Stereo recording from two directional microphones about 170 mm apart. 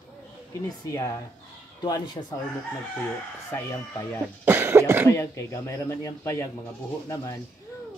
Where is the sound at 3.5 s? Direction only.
15° left (ahead or behind).